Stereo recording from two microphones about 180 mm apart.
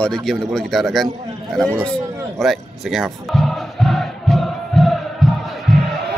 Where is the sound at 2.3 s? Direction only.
Centre (ahead or behind).